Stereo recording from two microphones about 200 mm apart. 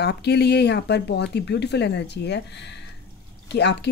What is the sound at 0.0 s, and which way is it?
Speech, 55° left (ahead or behind).